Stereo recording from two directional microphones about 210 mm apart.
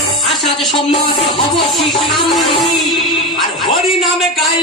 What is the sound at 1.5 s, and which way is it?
Speech, centre (ahead or behind).